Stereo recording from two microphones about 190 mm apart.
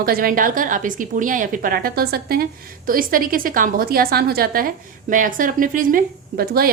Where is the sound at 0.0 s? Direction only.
50° right (ahead or behind).